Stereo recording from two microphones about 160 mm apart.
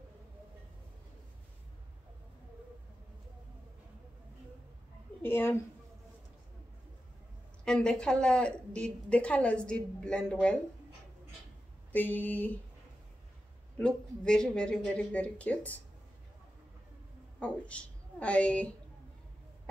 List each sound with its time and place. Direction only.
5.2 s speech: 15° left (ahead or behind)
7.6 s a woman's voice: 5° left (ahead or behind)
11.9 s speech: 10° left (ahead or behind)
13.7 s speech: 5° left (ahead or behind)
17.4 s a woman's voice: 5° left (ahead or behind)